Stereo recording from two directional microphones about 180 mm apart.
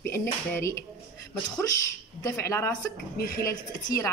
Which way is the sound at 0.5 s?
15° left (ahead or behind).